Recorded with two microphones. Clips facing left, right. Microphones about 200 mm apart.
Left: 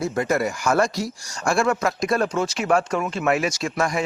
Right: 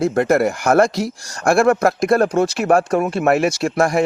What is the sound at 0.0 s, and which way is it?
Speech, 55° right (ahead or behind).